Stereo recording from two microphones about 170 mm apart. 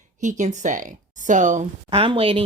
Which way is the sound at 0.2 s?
45° right (ahead or behind).